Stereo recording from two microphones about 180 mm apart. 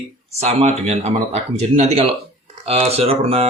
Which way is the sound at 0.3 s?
40° right (ahead or behind).